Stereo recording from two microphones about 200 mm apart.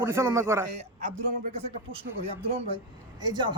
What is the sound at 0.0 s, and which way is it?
Speech, 15° right (ahead or behind).